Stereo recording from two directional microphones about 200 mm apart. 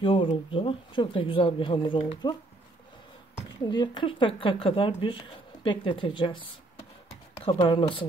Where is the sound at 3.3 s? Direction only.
20° left (ahead or behind).